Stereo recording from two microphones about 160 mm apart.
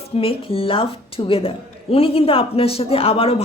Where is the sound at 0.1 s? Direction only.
35° left (ahead or behind).